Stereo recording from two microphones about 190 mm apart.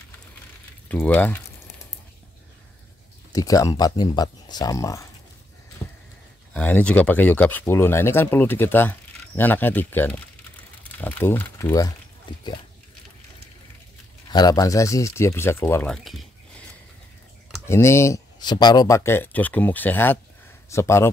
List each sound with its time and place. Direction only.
0.8 s speech: 10° left (ahead or behind)
3.3 s speech: 15° left (ahead or behind)
5.8 s a sound: 5° left (ahead or behind)
6.5 s speech: 5° left (ahead or behind)
12.3 s pig: 25° left (ahead or behind)
14.3 s speech: 20° left (ahead or behind); by 16.6 s centre (ahead or behind)
17.6 s speech: 15° left (ahead or behind)